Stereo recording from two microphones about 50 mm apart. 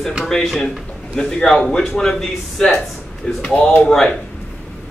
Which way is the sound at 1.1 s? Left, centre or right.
Centre.